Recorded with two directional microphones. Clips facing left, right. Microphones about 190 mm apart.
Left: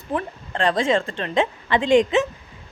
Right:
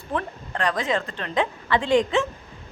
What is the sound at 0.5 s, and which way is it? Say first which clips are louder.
A woman's voice: left 5 dB; 25° left (ahead or behind).